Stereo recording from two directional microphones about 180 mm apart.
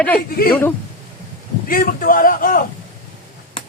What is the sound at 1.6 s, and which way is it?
A man's voice, 50° left (ahead or behind).